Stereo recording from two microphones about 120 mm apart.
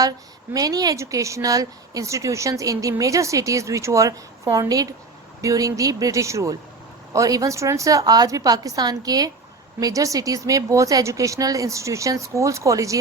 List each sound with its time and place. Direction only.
0.5 s a woman's voice: 30° right (ahead or behind)